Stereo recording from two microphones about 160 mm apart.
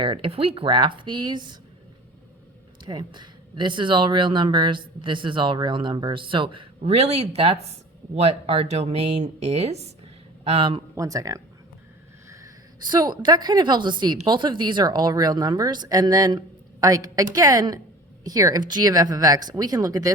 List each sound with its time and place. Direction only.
0.0 s speech: 35° right (ahead or behind)
2.8 s speech: 30° right (ahead or behind)
10.9 s a woman's voice: 20° right (ahead or behind)
12.9 s a woman's voice: 25° right (ahead or behind)